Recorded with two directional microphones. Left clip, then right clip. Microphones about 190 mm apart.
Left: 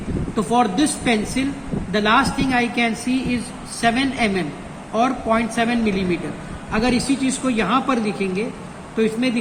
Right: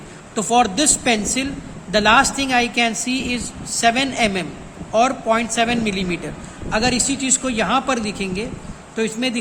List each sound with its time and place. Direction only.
0.3 s speech: 70° right (ahead or behind)